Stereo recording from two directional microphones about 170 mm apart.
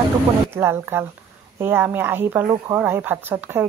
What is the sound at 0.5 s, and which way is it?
Speech, 15° right (ahead or behind).